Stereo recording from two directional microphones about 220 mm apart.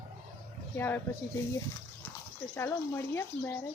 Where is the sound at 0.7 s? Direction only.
10° left (ahead or behind).